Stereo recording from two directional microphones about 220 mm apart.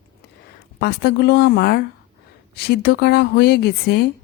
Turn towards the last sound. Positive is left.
turn(degrees=45)  # may be behind; listen again after turning